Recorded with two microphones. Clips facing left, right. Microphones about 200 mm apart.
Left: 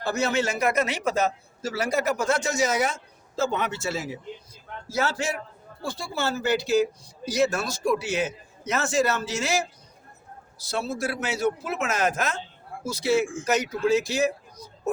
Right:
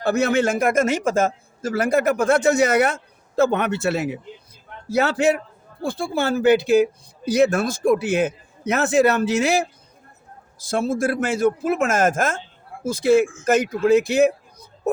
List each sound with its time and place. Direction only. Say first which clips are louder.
0.0 s a man's voice: right 6 dB; 60° right (ahead or behind)